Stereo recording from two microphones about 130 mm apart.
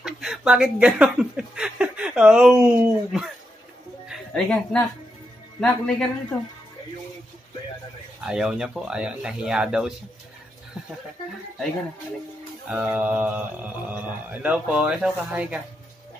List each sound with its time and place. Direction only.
0.0 s speech: 5° right (ahead or behind)
4.1 s a man's voice: 5° left (ahead or behind)
8.3 s speech: 5° right (ahead or behind)
12.6 s mantra: 10° right (ahead or behind)